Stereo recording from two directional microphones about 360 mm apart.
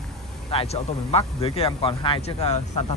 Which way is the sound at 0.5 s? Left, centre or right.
Centre.